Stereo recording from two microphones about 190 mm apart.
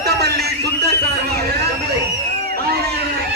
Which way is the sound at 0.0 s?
60° right (ahead or behind).